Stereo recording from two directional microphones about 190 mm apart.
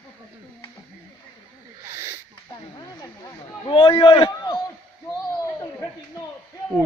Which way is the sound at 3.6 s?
30° left (ahead or behind).